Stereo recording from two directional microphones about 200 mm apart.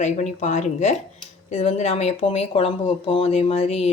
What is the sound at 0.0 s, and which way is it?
Speech, 35° left (ahead or behind).